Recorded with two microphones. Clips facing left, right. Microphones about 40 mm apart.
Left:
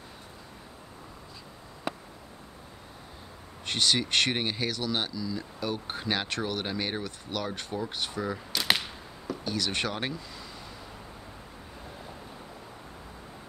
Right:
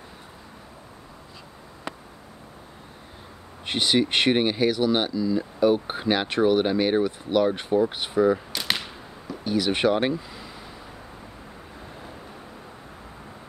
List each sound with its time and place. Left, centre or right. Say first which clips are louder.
3.6 s speech: right 5 dB; centre
8.5 s whip: even; centre
9.3 s speech: right 7 dB; centre